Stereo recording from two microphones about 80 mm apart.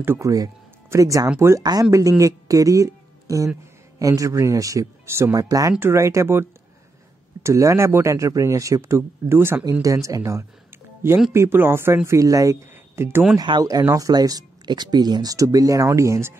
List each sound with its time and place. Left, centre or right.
0.0 s speech: right
0.8 s speech: right
5.3 s speech: right
5.8 s speech: right
7.4 s speech: right
9.7 s speech: right
11.3 s speech: right
13.6 s speech: right
15.3 s speech: right